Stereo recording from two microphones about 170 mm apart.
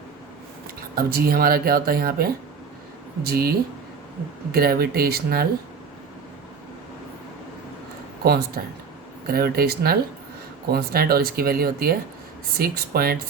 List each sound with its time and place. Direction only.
0.9 s speech: 60° right (ahead or behind)
8.2 s speech: 65° right (ahead or behind)